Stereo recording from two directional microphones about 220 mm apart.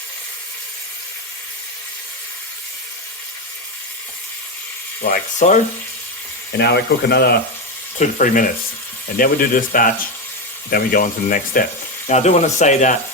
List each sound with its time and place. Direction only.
5.1 s speech: 35° left (ahead or behind)
6.6 s speech: 50° left (ahead or behind)
7.9 s speech: 35° left (ahead or behind)